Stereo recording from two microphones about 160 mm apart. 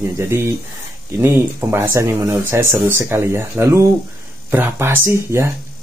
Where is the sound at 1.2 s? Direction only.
15° right (ahead or behind).